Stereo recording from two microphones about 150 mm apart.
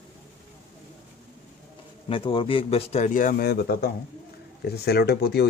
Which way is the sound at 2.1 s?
35° left (ahead or behind).